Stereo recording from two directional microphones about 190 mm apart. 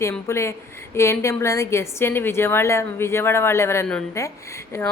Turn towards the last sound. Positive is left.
turn(degrees=15)  # may be behind; listen again after turning